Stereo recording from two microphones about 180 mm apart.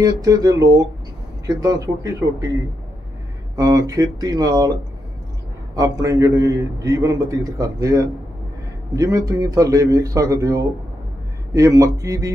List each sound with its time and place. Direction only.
0.0 s a man's voice: 20° right (ahead or behind)
3.5 s a man's voice: 20° right (ahead or behind)
5.8 s a man's voice: 20° right (ahead or behind)